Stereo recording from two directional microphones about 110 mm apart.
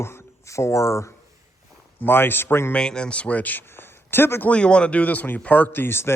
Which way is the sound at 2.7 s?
5° left (ahead or behind).